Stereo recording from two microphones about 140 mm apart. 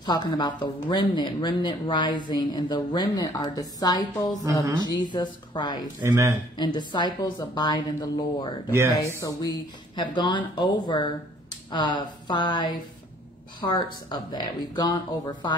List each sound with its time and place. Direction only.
0.0 s speech: 30° left (ahead or behind)
6.0 s speech: 20° right (ahead or behind)
6.6 s speech: 30° left (ahead or behind)
8.6 s speech: 20° right (ahead or behind)
9.2 s speech: 25° left (ahead or behind)